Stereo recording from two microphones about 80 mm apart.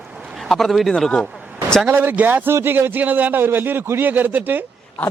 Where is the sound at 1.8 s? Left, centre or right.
Right.